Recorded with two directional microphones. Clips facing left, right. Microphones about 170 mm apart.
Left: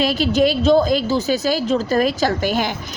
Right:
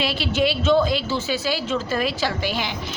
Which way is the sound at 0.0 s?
40° left (ahead or behind).